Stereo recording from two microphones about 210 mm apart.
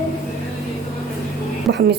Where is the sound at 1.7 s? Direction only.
55° right (ahead or behind).